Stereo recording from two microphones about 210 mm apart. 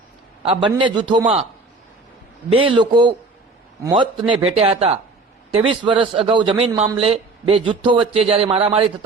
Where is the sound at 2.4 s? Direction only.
25° right (ahead or behind).